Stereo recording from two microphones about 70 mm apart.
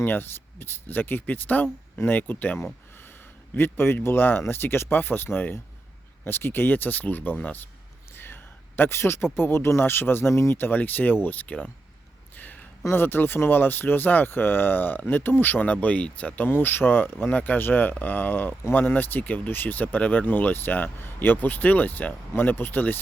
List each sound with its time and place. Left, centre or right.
0.0 s speech: left
8.1 s a sound: left
9.4 s speech: left; by 11.7 s centre
12.8 s speech: left